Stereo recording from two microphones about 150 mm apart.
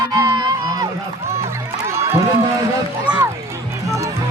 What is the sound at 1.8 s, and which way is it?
Music, 20° right (ahead or behind).